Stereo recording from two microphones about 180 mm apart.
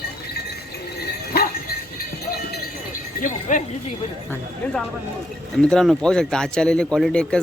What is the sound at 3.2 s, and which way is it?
Speech, 45° left (ahead or behind).